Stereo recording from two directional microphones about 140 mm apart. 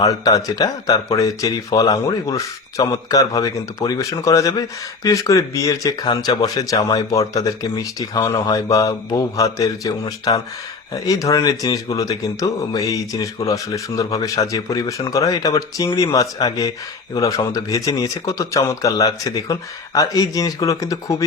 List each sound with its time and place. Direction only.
0.0 s speech: 25° left (ahead or behind)